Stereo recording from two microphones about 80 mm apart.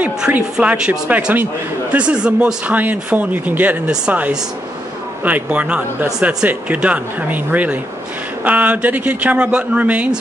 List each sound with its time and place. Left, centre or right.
0.0 s speech: centre